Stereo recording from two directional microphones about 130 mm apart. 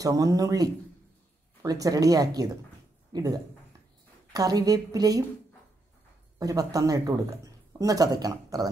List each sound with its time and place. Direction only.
0.0 s speech: 25° right (ahead or behind)
6.4 s speech: 25° right (ahead or behind)